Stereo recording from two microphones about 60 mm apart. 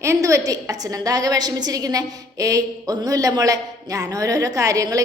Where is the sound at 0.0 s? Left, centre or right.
Right.